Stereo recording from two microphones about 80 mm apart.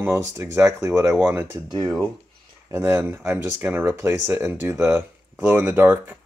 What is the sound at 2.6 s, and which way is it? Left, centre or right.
Speech, right.